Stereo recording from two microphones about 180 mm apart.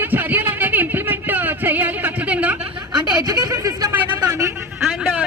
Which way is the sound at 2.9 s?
20° right (ahead or behind).